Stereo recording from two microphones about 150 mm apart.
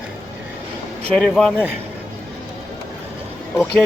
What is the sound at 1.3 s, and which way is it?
Speech, centre (ahead or behind).